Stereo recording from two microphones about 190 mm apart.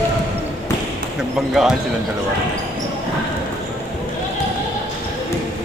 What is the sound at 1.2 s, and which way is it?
Speech, centre (ahead or behind).